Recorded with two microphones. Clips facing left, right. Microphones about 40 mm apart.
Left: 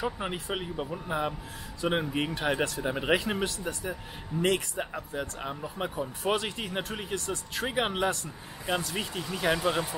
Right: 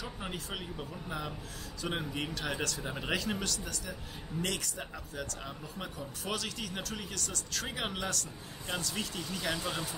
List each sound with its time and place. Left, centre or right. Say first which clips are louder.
0.0 s speech: left 8 dB; left